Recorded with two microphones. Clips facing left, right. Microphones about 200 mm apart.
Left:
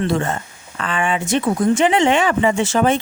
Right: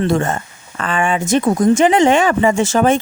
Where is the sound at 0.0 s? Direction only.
45° right (ahead or behind).